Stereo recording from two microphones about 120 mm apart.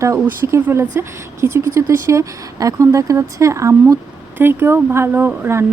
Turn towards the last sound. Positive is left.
turn(degrees=-20)  # may be behind; listen again after turning